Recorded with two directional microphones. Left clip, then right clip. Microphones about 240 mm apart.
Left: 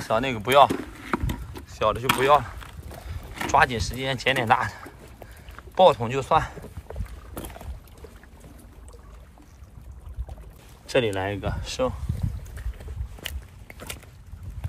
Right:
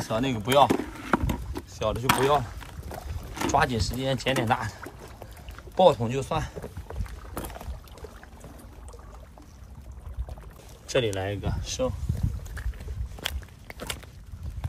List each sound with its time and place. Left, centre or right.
0.0 s speech: centre
0.7 s a sound: right
1.7 s speech: centre
5.8 s speech: centre
6.9 s boat: centre
10.9 s speech: centre
13.2 s walk: centre